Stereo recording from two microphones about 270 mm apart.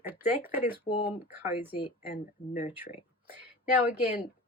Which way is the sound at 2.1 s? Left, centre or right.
Left.